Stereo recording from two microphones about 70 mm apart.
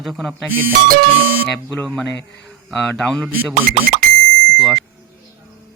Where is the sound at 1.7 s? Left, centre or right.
Left.